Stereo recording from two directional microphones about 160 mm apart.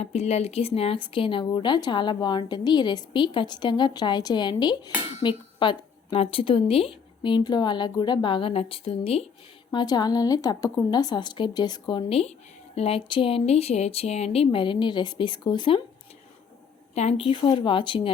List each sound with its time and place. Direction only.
0.0 s a woman's voice: 40° left (ahead or behind)
9.7 s a woman's voice: 25° left (ahead or behind)
16.9 s a woman's voice: 40° left (ahead or behind)